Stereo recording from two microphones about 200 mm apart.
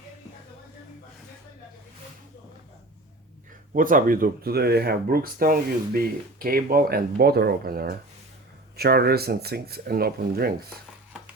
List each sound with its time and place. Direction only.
3.7 s speech: 45° right (ahead or behind)